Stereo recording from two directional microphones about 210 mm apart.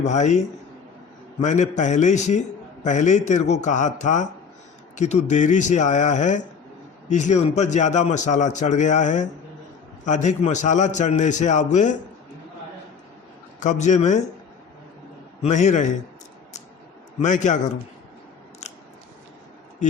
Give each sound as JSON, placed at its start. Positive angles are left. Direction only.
{"t": 0.0, "sound": "a man's voice", "side_deg": 35}
{"t": 13.6, "sound": "a man's voice", "side_deg": 35}
{"t": 15.4, "sound": "a man's voice", "side_deg": 35}
{"t": 17.2, "sound": "a man's voice", "side_deg": 35}